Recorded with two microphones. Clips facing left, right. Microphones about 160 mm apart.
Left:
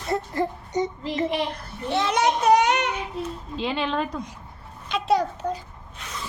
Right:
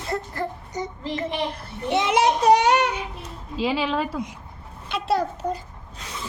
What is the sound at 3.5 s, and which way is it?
Speech, 5° right (ahead or behind).